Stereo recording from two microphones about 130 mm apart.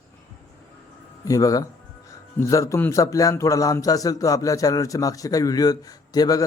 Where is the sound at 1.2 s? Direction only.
25° left (ahead or behind).